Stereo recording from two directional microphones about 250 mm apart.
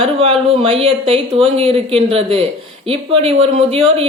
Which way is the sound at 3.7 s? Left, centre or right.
Right.